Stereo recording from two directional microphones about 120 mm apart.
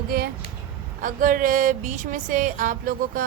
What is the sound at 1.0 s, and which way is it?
Speech, 90° right.